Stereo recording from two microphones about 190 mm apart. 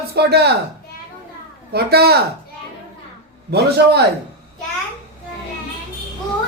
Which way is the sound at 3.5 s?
60° right (ahead or behind).